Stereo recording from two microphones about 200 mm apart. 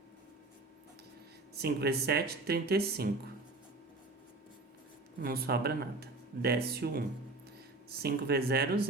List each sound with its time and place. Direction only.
1.5 s speech: 50° right (ahead or behind)
5.2 s speech: 50° right (ahead or behind)